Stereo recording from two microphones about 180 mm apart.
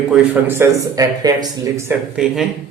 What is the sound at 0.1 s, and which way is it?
Speech, 15° right (ahead or behind).